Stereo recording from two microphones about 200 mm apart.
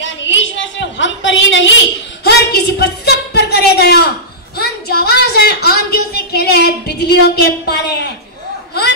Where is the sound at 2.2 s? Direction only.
55° left (ahead or behind).